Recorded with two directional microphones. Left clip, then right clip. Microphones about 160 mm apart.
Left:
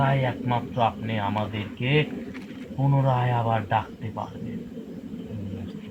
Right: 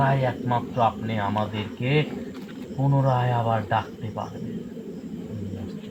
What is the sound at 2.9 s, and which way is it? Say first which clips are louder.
Speech: right 1 dB; 5° left (ahead or behind).